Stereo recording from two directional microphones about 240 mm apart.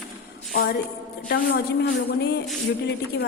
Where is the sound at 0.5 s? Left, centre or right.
Left.